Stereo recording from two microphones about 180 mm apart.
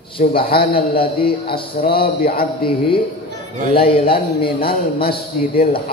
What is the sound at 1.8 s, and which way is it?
Speech, 55° left (ahead or behind).